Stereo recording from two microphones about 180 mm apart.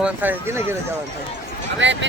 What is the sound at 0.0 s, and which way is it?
Speech, 10° right (ahead or behind).